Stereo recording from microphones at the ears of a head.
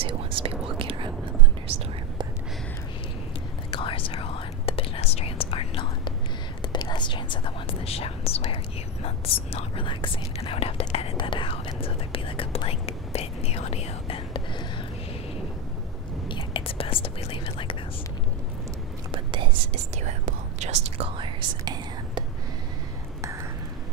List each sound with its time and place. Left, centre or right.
0.0 s whispering: right
3.7 s whispering: left
16.5 s whispering: left
19.1 s whispering: right